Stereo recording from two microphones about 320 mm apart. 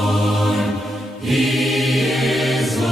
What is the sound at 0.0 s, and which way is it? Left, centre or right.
Mantra, centre.